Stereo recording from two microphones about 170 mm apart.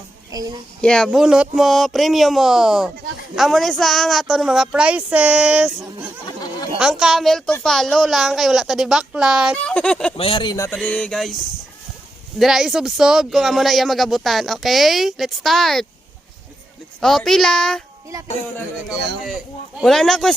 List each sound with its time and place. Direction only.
0.3 s a woman's voice: 20° right (ahead or behind)
0.8 s speech: 5° left (ahead or behind)
10.2 s speech: 30° left (ahead or behind)
10.8 s speech: 5° left (ahead or behind)
12.4 s speech: centre (ahead or behind)
17.0 s speech: centre (ahead or behind)
18.9 s a man's voice: 80° right
19.8 s speech: centre (ahead or behind)